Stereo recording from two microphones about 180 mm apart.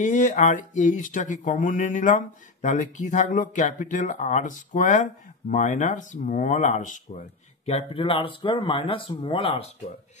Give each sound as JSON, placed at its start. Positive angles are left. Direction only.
{"t": 0.0, "sound": "speech", "side_deg": 40}